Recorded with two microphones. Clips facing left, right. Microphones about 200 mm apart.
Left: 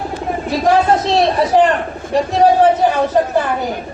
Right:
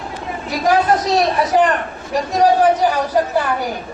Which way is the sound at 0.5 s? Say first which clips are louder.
Left 2 dB; 25° left (ahead or behind).